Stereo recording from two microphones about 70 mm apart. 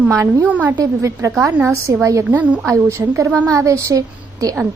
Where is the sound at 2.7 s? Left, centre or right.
Right.